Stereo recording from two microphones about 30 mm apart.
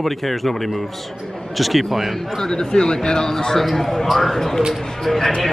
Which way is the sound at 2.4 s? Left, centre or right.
Left.